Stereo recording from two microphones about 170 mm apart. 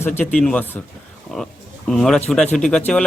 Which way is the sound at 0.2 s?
10° left (ahead or behind).